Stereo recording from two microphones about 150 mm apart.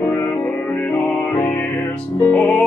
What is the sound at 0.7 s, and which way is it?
Music, 10° left (ahead or behind).